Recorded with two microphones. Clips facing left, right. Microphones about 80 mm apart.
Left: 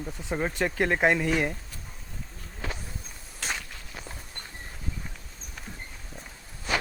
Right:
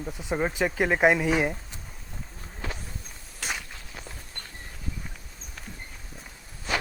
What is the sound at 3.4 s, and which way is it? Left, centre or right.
Walk, centre.